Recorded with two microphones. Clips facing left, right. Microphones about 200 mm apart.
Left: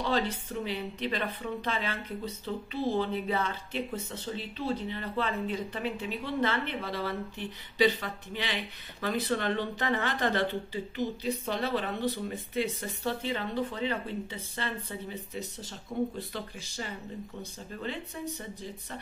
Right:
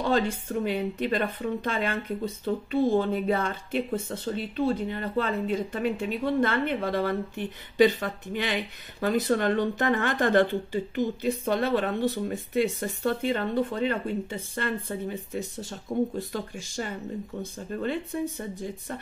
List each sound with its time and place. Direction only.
0.0 s speech: 50° right (ahead or behind)